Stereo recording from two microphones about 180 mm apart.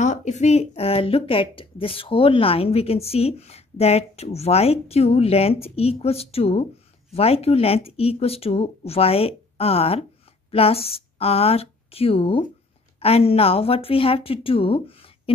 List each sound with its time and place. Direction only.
0.0 s speech: 40° left (ahead or behind)